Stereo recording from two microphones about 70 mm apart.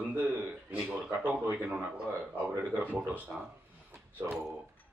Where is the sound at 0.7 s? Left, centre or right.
Centre.